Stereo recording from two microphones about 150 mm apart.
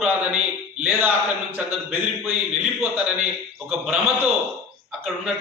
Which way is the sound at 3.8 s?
5° right (ahead or behind).